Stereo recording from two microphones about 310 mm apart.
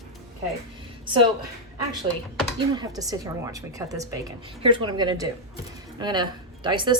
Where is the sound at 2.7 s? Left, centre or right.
Centre.